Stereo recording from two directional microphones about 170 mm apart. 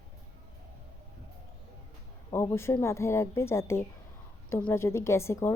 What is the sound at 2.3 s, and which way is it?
A woman's voice, 15° left (ahead or behind).